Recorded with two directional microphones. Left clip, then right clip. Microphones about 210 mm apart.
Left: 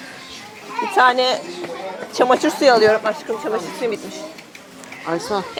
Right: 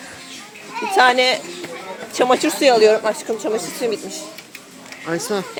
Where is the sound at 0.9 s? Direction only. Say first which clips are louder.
Right 1 dB; 15° right (ahead or behind).